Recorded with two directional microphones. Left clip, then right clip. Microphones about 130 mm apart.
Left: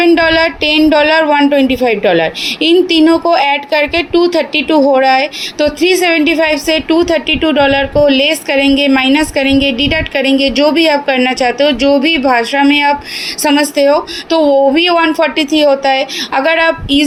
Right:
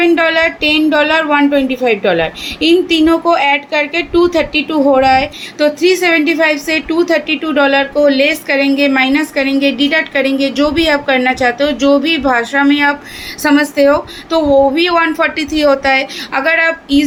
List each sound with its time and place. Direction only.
0.0 s a woman's voice: 40° left (ahead or behind)